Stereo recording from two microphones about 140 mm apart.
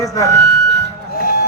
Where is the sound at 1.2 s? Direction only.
90° left.